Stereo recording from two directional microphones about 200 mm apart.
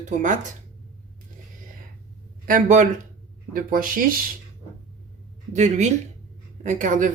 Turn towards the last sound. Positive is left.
turn(degrees=-40)  # may be behind; listen again after turning